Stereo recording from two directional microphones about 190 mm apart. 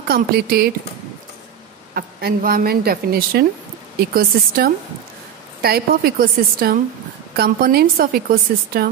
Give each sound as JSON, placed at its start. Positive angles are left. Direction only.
{"t": 0.1, "sound": "a woman's voice", "side_deg": -55}
{"t": 2.0, "sound": "a woman's voice", "side_deg": -55}